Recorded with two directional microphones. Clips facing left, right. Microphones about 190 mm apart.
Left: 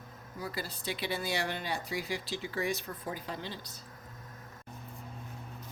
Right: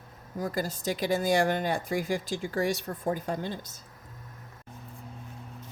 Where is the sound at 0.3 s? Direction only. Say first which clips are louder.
Right 8 dB; 45° right (ahead or behind).